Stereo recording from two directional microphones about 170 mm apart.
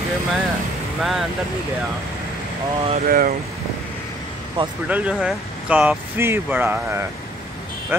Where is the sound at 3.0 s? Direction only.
60° right (ahead or behind).